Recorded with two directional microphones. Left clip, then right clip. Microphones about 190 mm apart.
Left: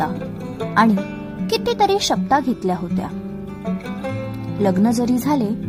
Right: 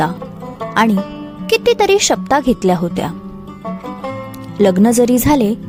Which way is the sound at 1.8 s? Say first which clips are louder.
Right 5 dB; 35° right (ahead or behind).